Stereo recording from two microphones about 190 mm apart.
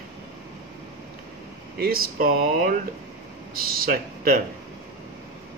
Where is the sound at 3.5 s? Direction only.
50° right (ahead or behind).